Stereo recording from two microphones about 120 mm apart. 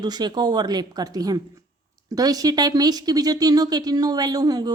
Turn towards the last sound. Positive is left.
turn(degrees=-30)  # may be behind; listen again after turning